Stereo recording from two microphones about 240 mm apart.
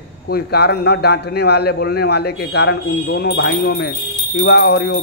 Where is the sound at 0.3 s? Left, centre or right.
Left.